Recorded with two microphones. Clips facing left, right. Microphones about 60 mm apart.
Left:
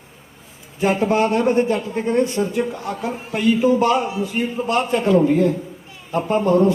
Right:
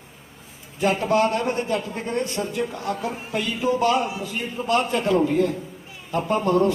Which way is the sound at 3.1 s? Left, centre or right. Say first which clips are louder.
Left 4 dB; centre.